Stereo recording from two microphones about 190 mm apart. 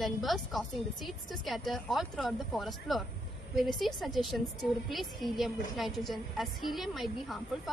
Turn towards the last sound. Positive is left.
turn(degrees=0)  # may be behind; listen again after turning